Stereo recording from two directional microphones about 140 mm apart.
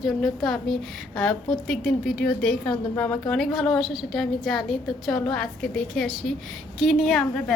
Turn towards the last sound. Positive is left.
turn(degrees=0)  # may be behind; listen again after turning